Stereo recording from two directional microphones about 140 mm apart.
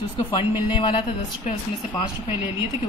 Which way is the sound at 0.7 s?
40° left (ahead or behind).